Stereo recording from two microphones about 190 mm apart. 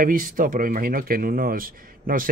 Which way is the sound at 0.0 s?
45° right (ahead or behind).